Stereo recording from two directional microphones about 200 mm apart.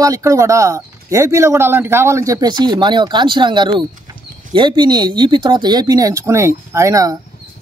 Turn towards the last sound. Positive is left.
turn(degrees=-15)  # may be behind; listen again after turning